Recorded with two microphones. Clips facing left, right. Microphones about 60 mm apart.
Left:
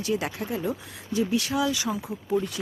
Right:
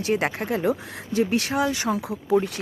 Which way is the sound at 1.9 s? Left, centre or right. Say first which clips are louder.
Right 5 dB; right.